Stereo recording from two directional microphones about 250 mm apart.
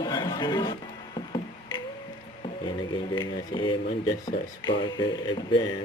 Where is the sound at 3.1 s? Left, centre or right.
Centre.